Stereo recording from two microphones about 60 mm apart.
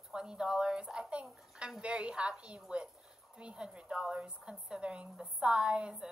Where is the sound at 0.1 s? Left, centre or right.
Centre.